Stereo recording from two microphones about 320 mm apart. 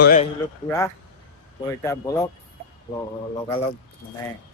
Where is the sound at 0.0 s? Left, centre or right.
Left.